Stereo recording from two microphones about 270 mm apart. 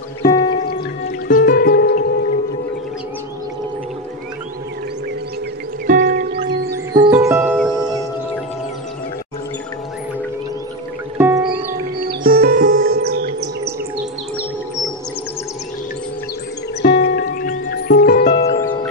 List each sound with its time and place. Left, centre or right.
0.2 s music: centre
1.2 s music: left
5.9 s music: right
6.7 s music: centre
11.1 s music: centre
12.1 s music: right
16.8 s music: left